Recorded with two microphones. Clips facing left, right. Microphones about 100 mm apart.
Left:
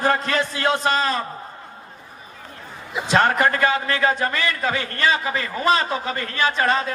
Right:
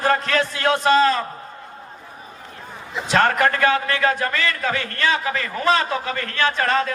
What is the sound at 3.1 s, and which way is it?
A man's voice, 15° left (ahead or behind).